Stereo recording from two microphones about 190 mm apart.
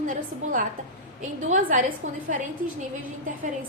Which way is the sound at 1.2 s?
40° right (ahead or behind).